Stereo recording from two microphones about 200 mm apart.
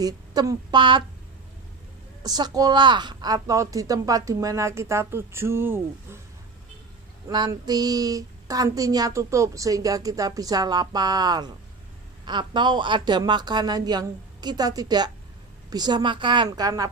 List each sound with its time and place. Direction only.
0.0 s speech: 20° right (ahead or behind)
2.2 s speech: 20° right (ahead or behind)
7.2 s speech: 20° right (ahead or behind)